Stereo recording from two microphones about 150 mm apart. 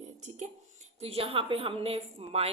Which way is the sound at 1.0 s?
40° right (ahead or behind).